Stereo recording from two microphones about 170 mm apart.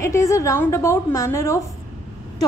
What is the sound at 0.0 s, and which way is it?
A woman's voice, 15° left (ahead or behind).